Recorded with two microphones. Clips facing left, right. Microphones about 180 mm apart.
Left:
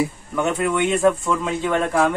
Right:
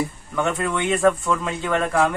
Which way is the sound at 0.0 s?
Centre (ahead or behind).